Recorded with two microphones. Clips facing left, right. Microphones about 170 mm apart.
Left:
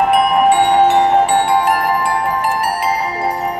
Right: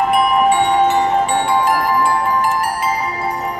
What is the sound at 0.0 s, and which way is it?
Music, 65° left (ahead or behind).